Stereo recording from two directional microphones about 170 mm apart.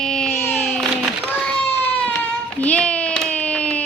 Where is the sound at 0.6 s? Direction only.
Centre (ahead or behind).